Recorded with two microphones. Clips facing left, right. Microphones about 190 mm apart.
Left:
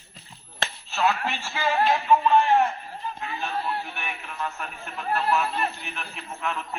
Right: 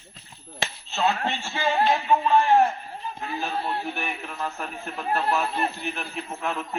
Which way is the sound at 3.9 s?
40° right (ahead or behind).